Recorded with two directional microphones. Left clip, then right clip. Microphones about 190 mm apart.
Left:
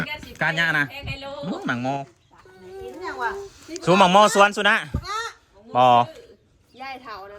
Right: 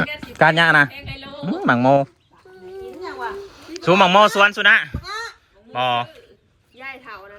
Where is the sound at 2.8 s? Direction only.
Centre (ahead or behind).